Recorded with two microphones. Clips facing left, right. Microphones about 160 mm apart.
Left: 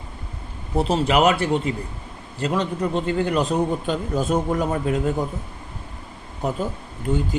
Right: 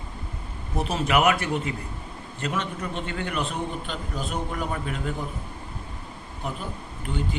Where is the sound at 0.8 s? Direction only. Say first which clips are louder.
Left 5 dB; 30° left (ahead or behind).